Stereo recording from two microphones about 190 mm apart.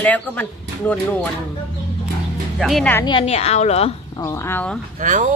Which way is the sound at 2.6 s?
Centre (ahead or behind).